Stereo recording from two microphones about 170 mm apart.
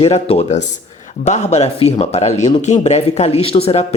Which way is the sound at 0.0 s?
35° left (ahead or behind).